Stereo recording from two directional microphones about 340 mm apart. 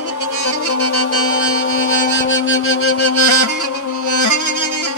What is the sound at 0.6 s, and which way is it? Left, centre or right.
Music, left.